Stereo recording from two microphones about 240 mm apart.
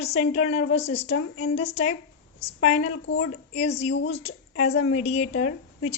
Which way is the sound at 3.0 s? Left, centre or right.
Left.